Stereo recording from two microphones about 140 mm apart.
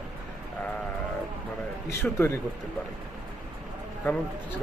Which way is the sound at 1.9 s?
20° left (ahead or behind).